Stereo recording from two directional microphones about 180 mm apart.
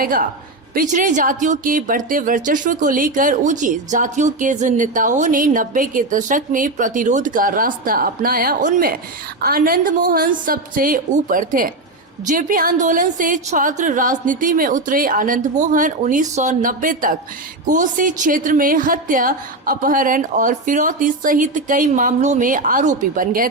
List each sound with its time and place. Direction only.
0.0 s speech: 50° right (ahead or behind)